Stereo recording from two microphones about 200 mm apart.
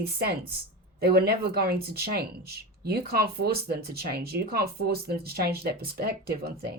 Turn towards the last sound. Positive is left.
turn(degrees=-50)  # may be behind; listen again after turning